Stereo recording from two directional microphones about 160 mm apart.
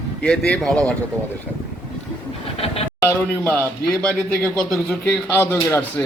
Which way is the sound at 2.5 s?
40° left (ahead or behind).